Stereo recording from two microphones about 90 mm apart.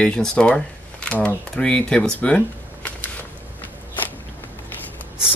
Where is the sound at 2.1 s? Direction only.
15° left (ahead or behind).